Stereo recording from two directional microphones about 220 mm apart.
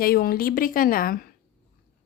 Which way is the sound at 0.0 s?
45° left (ahead or behind).